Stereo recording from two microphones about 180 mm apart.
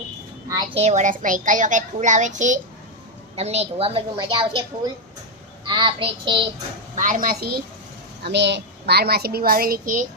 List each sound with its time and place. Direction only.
0.7 s a child's voice: 40° right (ahead or behind)
5.6 s child singing: 25° right (ahead or behind)
6.9 s a child's voice: 45° right (ahead or behind)
8.2 s a child's voice: 70° right (ahead or behind); by 10.0 s 50° right (ahead or behind)